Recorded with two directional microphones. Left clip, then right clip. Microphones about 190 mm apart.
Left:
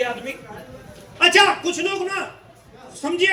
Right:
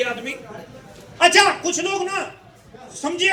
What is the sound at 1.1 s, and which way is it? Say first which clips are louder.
Speech: even; 30° right (ahead or behind).